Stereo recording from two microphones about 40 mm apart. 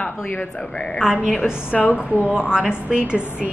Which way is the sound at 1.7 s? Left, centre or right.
Left.